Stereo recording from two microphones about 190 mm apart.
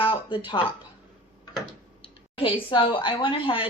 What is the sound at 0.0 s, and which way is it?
Speech, 25° left (ahead or behind).